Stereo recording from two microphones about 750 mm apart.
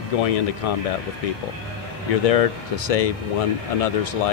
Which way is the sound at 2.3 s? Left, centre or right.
Left.